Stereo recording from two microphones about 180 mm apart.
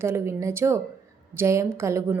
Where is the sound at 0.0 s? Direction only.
15° right (ahead or behind).